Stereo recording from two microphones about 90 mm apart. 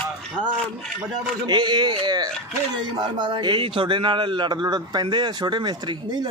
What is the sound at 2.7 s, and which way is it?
A man's voice, 65° right (ahead or behind).